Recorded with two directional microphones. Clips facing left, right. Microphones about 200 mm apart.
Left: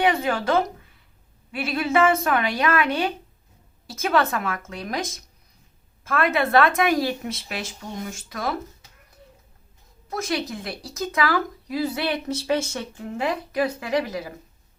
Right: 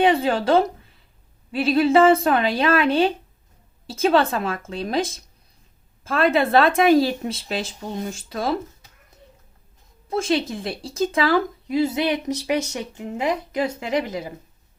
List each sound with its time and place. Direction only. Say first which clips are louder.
0.0 s a woman's voice: right 4 dB; 30° right (ahead or behind)
10.1 s speech: right 5 dB; 25° right (ahead or behind)